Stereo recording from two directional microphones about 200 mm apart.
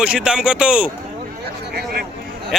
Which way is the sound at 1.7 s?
50° right (ahead or behind).